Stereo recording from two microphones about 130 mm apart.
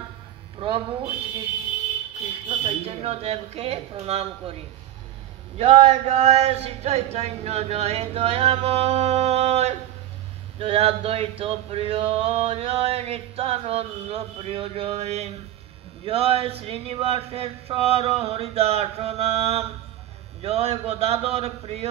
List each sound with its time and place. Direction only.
0.6 s speech: 40° right (ahead or behind)
2.6 s male singing: 50° right (ahead or behind)
5.6 s a sound: 55° right (ahead or behind)
10.6 s male singing: 50° right (ahead or behind)